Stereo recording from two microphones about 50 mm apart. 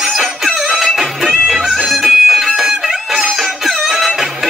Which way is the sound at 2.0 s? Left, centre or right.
Centre.